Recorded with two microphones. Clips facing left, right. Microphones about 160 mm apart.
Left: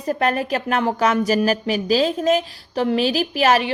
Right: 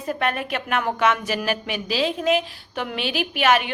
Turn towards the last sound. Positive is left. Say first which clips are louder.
# left 3 dB
turn(degrees=35)  # may be behind; listen again after turning